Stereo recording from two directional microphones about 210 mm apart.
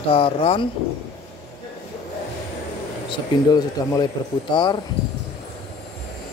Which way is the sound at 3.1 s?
20° left (ahead or behind).